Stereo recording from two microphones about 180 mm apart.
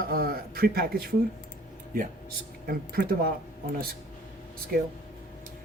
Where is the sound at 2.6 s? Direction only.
55° right (ahead or behind).